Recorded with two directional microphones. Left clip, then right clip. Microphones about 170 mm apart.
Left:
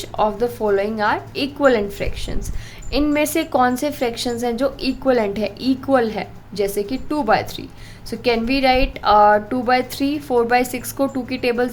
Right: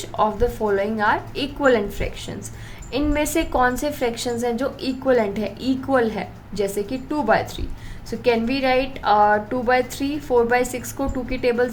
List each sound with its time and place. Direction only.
0.2 s a woman's voice: 25° left (ahead or behind)